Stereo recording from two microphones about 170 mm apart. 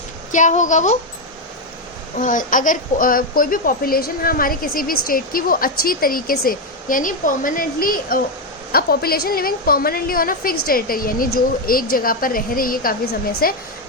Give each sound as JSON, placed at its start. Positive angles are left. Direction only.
{"t": 0.3, "sound": "a woman's voice", "side_deg": 45}
{"t": 2.1, "sound": "a child's voice", "side_deg": 50}